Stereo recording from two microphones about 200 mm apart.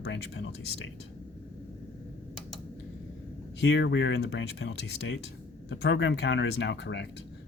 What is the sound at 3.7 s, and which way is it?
Speech, 60° left (ahead or behind).